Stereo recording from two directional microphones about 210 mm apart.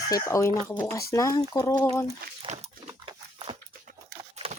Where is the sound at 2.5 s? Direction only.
30° right (ahead or behind).